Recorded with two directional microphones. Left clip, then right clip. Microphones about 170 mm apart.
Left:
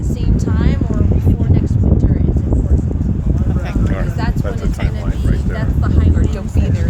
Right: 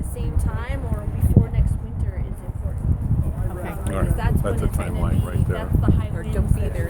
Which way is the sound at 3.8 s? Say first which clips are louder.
Left 1 dB; centre (ahead or behind).